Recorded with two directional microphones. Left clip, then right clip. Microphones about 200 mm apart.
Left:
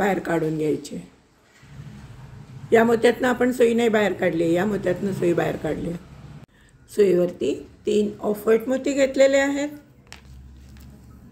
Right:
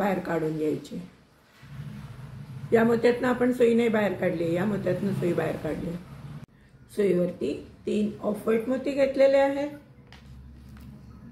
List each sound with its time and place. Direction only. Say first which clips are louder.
0.0 s speech: left 5 dB; 50° left (ahead or behind)
2.7 s speech: left 5 dB; 50° left (ahead or behind)
7.0 s speech: left 6 dB; 45° left (ahead or behind)